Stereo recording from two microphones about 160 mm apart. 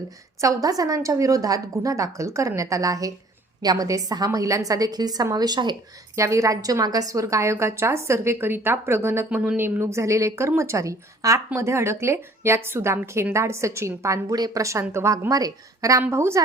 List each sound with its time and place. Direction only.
0.4 s a woman's voice: 20° right (ahead or behind)